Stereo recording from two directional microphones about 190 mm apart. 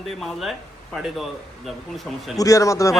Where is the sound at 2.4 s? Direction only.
15° left (ahead or behind).